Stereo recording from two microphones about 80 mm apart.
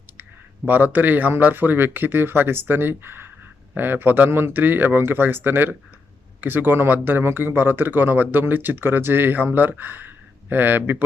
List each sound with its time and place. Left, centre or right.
0.2 s speech: right